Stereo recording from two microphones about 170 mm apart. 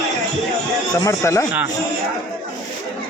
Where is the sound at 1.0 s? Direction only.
15° left (ahead or behind).